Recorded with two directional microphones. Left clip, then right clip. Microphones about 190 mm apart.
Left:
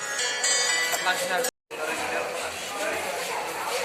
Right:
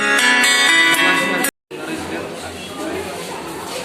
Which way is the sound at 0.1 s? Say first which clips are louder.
Right 12 dB; 45° right (ahead or behind).